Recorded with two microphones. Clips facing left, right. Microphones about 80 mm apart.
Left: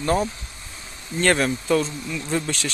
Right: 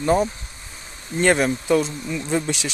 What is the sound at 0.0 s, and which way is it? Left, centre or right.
Speech, centre.